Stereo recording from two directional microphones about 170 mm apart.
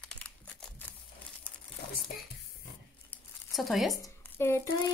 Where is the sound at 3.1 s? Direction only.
Centre (ahead or behind).